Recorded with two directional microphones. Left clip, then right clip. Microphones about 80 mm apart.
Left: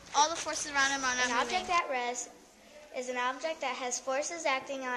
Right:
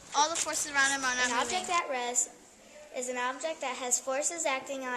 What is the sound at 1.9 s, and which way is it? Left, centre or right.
A woman's voice, right.